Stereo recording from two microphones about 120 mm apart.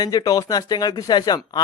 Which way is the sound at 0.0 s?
35° left (ahead or behind).